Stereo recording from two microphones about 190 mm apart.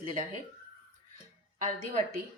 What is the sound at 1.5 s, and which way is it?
Speech, 40° right (ahead or behind).